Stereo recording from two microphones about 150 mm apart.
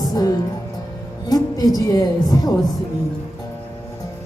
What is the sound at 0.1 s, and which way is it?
Speech, 25° left (ahead or behind).